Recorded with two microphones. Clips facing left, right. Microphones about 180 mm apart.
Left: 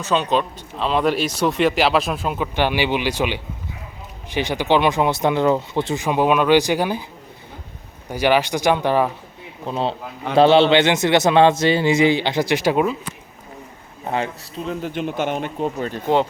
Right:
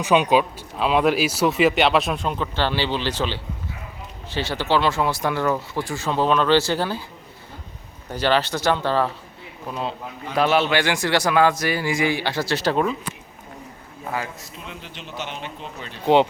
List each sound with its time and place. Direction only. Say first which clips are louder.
0.0 s speech: right 2 dB; 15° right (ahead or behind); by 7.0 s 15° left (ahead or behind)
8.1 s speech: left 3 dB; 10° left (ahead or behind)
9.6 s a man's voice: left 5 dB; 30° left (ahead or behind); by 13.0 s 5° left (ahead or behind)
14.0 s a man's voice: left 5 dB; 25° left (ahead or behind)
14.7 s speech: left 14 dB; 50° left (ahead or behind)